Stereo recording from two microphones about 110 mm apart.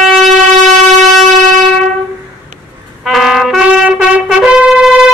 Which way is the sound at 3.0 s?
Centre (ahead or behind).